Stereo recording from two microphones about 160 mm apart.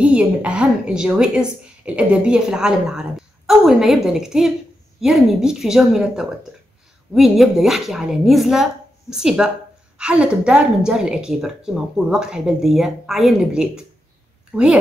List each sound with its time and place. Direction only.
0.0 s a woman's voice: 10° right (ahead or behind)